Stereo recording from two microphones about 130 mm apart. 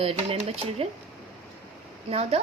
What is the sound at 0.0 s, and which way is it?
Speech, 50° right (ahead or behind).